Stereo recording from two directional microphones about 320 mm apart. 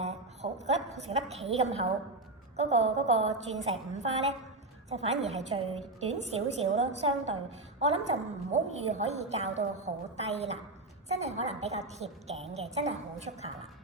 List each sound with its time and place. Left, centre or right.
0.0 s a woman's voice: centre